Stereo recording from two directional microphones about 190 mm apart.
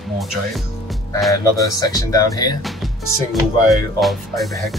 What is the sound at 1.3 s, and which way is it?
Speech, 20° left (ahead or behind).